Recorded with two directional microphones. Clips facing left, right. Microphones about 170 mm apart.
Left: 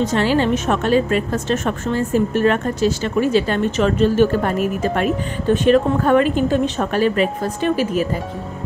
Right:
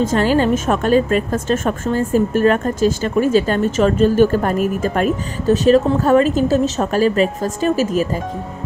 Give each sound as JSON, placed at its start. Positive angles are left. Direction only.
{"t": 0.1, "sound": "a woman's voice", "side_deg": -45}